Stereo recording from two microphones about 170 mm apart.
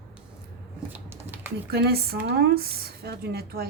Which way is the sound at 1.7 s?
65° right (ahead or behind).